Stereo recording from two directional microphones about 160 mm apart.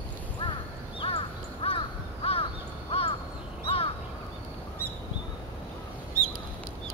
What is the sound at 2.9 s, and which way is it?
Crow, 40° left (ahead or behind).